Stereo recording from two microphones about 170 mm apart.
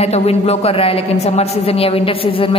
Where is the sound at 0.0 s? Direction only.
35° left (ahead or behind).